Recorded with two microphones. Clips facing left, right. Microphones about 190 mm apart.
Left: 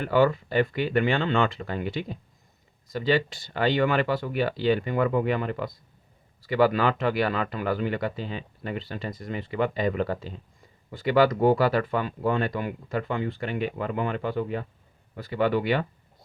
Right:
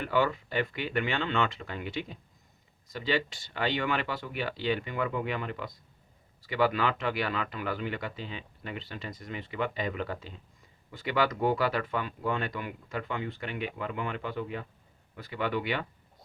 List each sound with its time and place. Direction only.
0.0 s speech: 40° left (ahead or behind)